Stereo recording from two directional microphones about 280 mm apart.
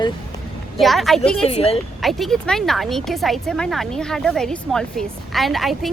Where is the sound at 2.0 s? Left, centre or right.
Centre.